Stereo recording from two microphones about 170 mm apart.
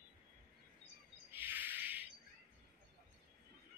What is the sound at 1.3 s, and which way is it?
Bird, 10° right (ahead or behind).